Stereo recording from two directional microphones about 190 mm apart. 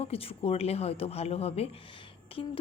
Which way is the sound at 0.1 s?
30° left (ahead or behind).